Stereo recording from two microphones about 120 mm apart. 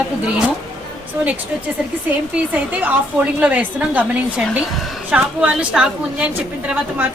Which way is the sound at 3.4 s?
15° right (ahead or behind).